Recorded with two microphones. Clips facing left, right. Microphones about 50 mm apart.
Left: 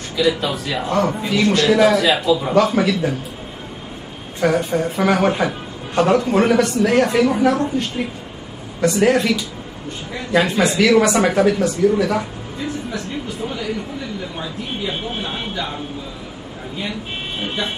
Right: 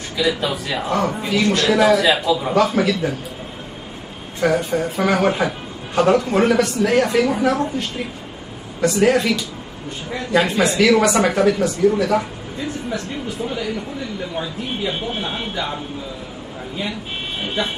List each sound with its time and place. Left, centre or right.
0.3 s speech: centre
4.4 s speech: centre
8.8 s speech: centre
14.9 s speech: centre